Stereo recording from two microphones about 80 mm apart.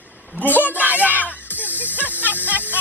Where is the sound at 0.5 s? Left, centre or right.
Right.